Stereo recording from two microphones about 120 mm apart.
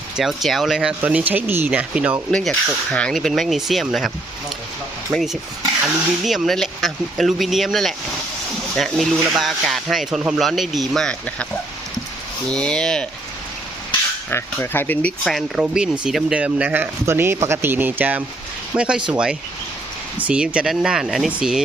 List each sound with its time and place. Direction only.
0.2 s speech: centre (ahead or behind)
2.3 s speech: centre (ahead or behind)
12.5 s speech: 5° left (ahead or behind)
14.3 s speech: 20° left (ahead or behind)
15.2 s speech: centre (ahead or behind)